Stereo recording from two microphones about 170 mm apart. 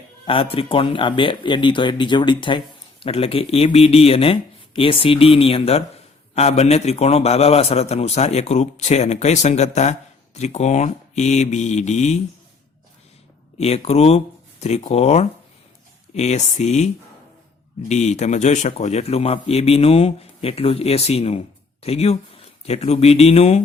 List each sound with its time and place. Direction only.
0.3 s speech: 35° left (ahead or behind)
13.6 s speech: 35° left (ahead or behind)